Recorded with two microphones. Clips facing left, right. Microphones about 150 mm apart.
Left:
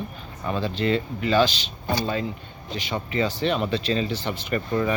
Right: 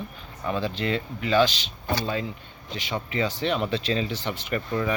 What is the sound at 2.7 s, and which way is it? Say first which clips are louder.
Speech: left 2 dB; 15° right (ahead or behind).